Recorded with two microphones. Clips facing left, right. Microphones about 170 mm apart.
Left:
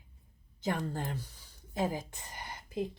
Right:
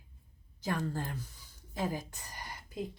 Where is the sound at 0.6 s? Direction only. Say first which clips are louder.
Left 1 dB; 20° left (ahead or behind).